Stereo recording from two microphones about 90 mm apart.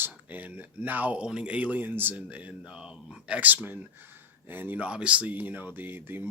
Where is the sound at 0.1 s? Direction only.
20° right (ahead or behind).